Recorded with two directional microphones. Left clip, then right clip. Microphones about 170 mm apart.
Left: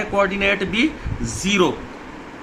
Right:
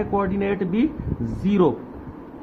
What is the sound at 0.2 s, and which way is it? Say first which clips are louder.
A man's voice: left 6 dB; 45° right (ahead or behind).